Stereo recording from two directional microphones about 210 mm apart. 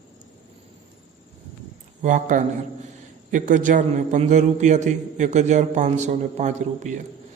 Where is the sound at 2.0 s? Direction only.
40° right (ahead or behind).